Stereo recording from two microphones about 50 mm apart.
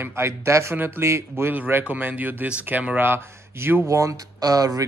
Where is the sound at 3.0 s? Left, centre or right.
Right.